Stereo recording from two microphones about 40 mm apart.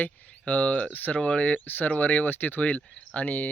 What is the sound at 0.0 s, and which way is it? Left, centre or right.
Speech, left.